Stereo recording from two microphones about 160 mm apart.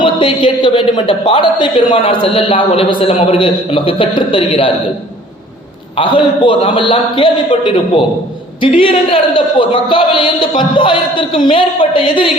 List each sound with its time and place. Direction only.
0.0 s speech: 30° left (ahead or behind)
6.0 s speech: 30° left (ahead or behind)